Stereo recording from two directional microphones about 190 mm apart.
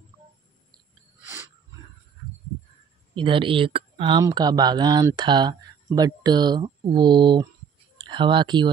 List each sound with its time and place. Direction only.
3.2 s speech: 25° right (ahead or behind)